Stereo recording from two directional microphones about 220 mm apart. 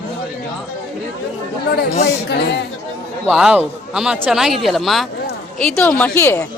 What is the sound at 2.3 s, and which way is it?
Speech, 50° left (ahead or behind).